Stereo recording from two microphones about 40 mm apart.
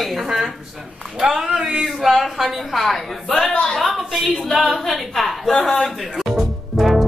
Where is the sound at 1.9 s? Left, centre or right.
Centre.